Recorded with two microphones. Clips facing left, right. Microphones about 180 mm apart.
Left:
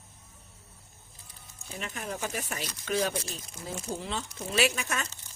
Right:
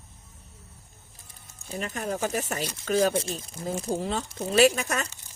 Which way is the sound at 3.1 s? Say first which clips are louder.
Right 8 dB; 25° right (ahead or behind).